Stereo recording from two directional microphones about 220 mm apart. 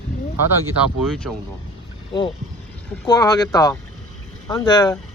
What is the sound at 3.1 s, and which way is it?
Speech, 15° left (ahead or behind).